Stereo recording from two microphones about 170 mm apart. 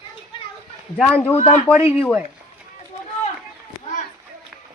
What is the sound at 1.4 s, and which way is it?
Speech, 40° left (ahead or behind).